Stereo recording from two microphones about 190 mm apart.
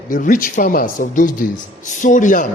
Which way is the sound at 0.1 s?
45° left (ahead or behind).